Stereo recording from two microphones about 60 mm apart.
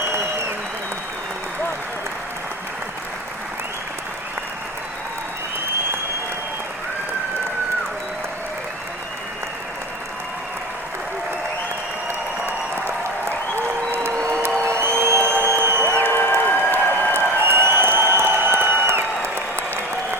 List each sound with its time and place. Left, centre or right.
14.6 s music: right
16.0 s a sound: left
17.2 s applause: right